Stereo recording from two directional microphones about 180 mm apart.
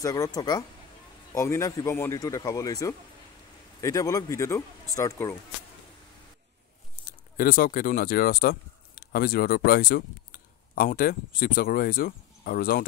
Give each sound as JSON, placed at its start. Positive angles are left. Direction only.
{"t": 0.0, "sound": "speech", "side_deg": 20}
{"t": 7.1, "sound": "speech", "side_deg": 50}